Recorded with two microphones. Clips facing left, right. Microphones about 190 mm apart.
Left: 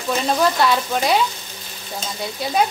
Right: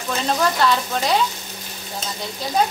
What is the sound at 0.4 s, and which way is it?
Speech, 10° left (ahead or behind).